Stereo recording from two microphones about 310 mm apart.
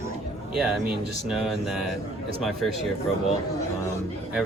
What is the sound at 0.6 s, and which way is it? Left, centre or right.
Speech, centre.